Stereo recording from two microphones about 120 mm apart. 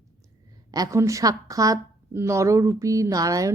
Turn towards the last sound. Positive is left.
turn(degrees=-30)  # may be behind; listen again after turning